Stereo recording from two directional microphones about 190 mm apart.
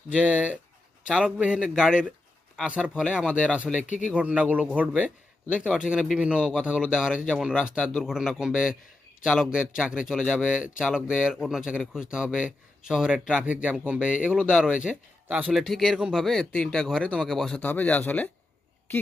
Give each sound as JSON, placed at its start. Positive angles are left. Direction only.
{"t": 0.3, "sound": "speech", "side_deg": -5}
{"t": 3.8, "sound": "speech", "side_deg": 40}
{"t": 4.1, "sound": "speech", "side_deg": -5}